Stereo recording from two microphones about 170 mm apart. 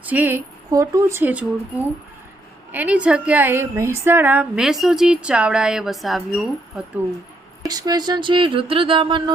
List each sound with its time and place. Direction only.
0.0 s speech: 10° right (ahead or behind)
2.7 s a woman's voice: 10° right (ahead or behind)
7.7 s a sound: 25° right (ahead or behind)